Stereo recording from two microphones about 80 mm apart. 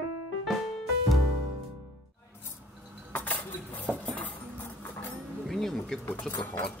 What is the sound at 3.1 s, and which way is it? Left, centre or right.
Cutlery, left.